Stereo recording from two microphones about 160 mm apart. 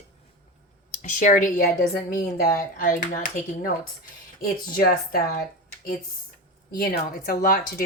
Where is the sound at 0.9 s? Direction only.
50° left (ahead or behind).